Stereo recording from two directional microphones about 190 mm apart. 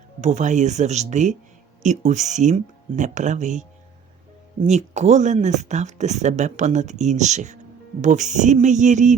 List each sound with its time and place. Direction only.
0.2 s speech: 35° right (ahead or behind)